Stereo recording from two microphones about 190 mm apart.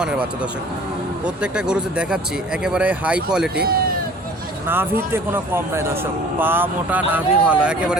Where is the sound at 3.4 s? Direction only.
55° right (ahead or behind).